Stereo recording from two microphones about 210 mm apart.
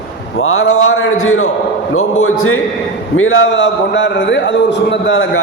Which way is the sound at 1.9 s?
90° left.